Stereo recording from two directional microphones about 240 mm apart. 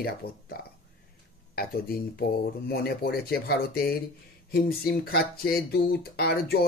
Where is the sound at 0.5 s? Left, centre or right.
Left.